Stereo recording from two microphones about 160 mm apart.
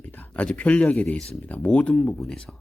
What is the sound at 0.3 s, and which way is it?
Speech, 10° left (ahead or behind).